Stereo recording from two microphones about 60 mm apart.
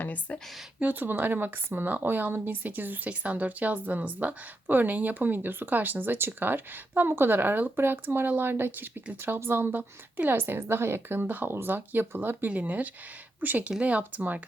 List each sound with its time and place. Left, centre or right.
0.0 s speech: left
0.8 s speech: right